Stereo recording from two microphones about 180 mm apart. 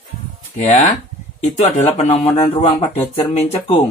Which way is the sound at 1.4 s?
40° left (ahead or behind).